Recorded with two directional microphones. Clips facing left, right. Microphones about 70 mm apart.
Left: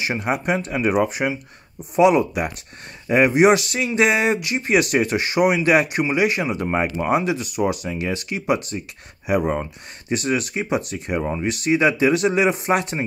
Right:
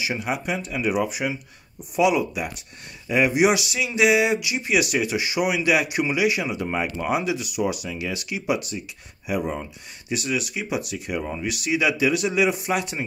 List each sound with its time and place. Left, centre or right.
0.0 s speech: left
9.3 s speech: left